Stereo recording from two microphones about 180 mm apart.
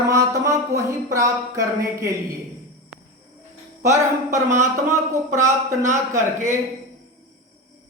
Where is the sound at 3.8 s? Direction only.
15° right (ahead or behind).